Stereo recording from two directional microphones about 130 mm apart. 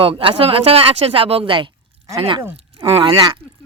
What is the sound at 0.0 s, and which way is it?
Speech, 45° right (ahead or behind).